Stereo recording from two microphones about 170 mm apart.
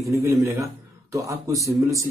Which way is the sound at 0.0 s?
15° right (ahead or behind).